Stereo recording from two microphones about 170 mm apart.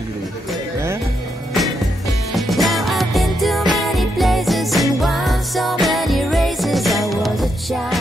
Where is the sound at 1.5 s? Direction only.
Centre (ahead or behind).